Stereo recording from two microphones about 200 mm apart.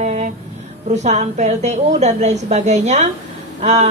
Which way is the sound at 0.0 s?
35° right (ahead or behind).